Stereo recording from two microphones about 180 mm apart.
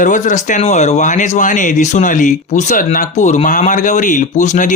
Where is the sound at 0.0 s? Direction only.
45° left (ahead or behind).